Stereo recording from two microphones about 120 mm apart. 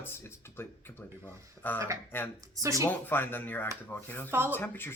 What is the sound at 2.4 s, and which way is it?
Speech, 30° right (ahead or behind).